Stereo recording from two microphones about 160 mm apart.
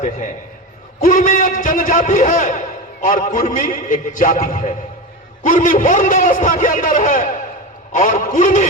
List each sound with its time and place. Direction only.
1.0 s a man's voice: 55° left (ahead or behind)